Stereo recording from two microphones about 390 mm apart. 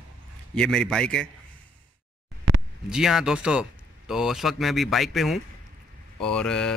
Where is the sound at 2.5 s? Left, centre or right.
Right.